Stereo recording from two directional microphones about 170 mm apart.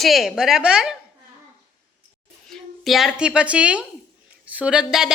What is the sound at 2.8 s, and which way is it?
A woman's voice, centre (ahead or behind).